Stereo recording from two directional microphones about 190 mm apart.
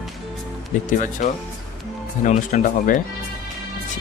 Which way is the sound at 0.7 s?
40° left (ahead or behind).